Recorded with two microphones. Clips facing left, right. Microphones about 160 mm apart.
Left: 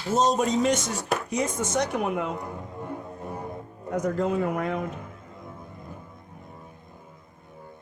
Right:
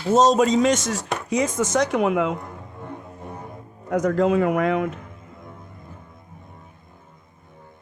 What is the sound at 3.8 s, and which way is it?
Speech, 90° right.